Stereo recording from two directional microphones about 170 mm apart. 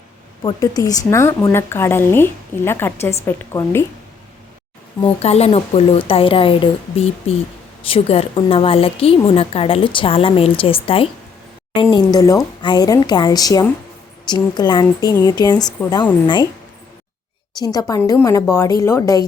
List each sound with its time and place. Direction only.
0.4 s a woman's voice: 20° left (ahead or behind)
5.2 s a woman's voice: 40° left (ahead or behind)
17.6 s speech: 25° left (ahead or behind)